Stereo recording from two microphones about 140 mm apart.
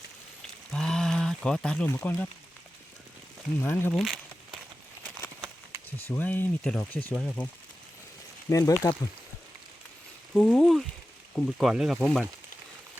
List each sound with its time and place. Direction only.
0.7 s a sound: 5° left (ahead or behind)
3.6 s speech: 15° left (ahead or behind)
3.9 s a sound: 5° right (ahead or behind)
6.1 s speech: 15° left (ahead or behind)
8.4 s speech: 25° left (ahead or behind)
10.3 s speech: centre (ahead or behind)